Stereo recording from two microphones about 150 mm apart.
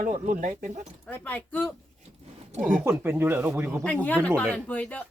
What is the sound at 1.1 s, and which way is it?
Speech, 10° left (ahead or behind).